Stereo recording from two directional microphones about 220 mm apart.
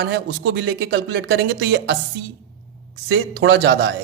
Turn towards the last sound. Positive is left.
turn(degrees=-50)  # may be behind; listen again after turning